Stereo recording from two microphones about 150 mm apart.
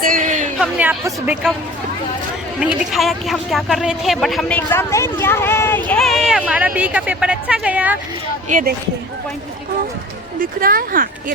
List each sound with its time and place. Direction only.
0.0 s a sound: 65° right (ahead or behind)
0.6 s speech: 10° right (ahead or behind)
2.9 s speech: centre (ahead or behind)
4.5 s speech: 15° left (ahead or behind); by 7.9 s 10° right (ahead or behind)
8.4 s speech: 60° right (ahead or behind)
10.4 s speech: 75° right (ahead or behind)